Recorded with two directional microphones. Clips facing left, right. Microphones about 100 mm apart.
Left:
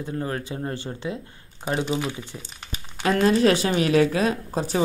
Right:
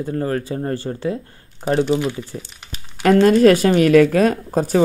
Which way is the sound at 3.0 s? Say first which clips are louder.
Right 7 dB; 50° right (ahead or behind).